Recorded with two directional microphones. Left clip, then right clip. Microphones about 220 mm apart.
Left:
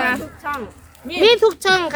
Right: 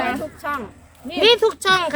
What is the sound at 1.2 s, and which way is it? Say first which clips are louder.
Speech: left 2 dB; centre (ahead or behind).